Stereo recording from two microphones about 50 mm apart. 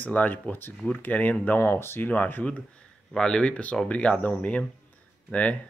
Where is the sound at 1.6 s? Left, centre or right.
Left.